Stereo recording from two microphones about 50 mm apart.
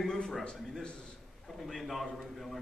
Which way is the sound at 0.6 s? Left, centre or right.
Centre.